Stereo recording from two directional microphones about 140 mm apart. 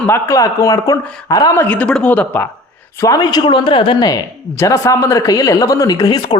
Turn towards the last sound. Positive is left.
turn(degrees=30)  # may be behind; listen again after turning